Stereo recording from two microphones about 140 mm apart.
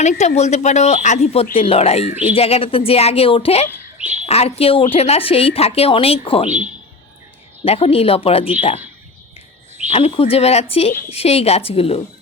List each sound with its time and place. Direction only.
0.0 s a woman's voice: 55° left (ahead or behind)
3.9 s bird: 10° right (ahead or behind)
4.3 s a woman's voice: 45° left (ahead or behind)
7.6 s a woman's voice: 45° left (ahead or behind)
9.9 s a woman's voice: 45° left (ahead or behind)